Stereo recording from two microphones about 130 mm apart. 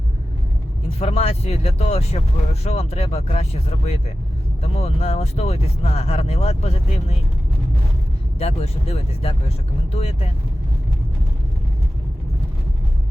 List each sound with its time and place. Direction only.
0.9 s speech: 50° left (ahead or behind)
8.4 s speech: 50° left (ahead or behind)